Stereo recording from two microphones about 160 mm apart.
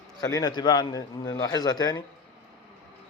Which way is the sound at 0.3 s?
20° left (ahead or behind).